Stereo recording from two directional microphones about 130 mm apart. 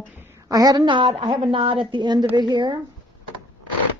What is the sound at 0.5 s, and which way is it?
A woman's voice, 30° right (ahead or behind).